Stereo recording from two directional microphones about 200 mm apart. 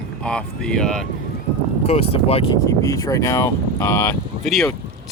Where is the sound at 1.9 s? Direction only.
30° left (ahead or behind).